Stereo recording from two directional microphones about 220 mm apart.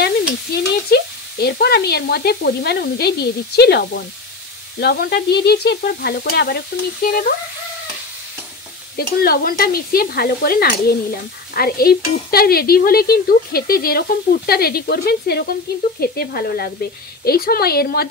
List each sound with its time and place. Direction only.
0.5 s stir: 45° left (ahead or behind)
8.9 s stir: 45° left (ahead or behind)